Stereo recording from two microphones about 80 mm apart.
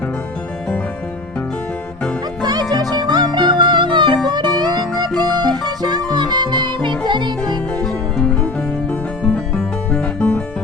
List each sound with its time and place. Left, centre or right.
2.4 s music: right
4.3 s music: right
7.8 s music: centre
9.6 s music: centre